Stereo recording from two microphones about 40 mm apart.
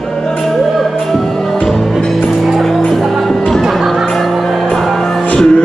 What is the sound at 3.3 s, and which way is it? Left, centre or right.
Music, centre.